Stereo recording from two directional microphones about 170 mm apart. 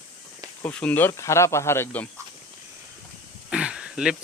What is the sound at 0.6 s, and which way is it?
Speech, 10° left (ahead or behind).